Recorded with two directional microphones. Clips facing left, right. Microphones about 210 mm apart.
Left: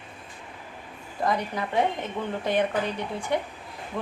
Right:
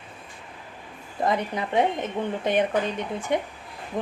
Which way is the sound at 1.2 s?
20° right (ahead or behind).